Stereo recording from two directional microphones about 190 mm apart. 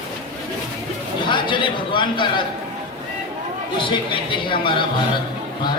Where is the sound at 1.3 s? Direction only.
25° left (ahead or behind).